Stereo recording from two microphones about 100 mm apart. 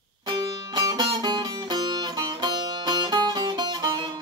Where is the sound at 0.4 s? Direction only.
40° right (ahead or behind).